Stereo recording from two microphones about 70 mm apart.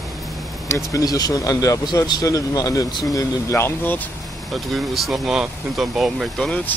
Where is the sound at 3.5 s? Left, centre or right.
Left.